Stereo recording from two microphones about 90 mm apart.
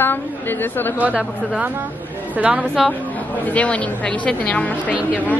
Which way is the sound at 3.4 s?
15° left (ahead or behind).